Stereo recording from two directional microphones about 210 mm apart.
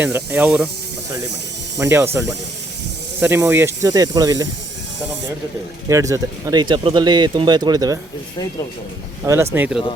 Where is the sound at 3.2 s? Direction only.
10° right (ahead or behind).